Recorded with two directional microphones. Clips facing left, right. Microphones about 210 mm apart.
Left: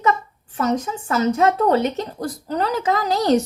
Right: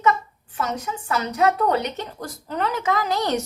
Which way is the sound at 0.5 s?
35° left (ahead or behind).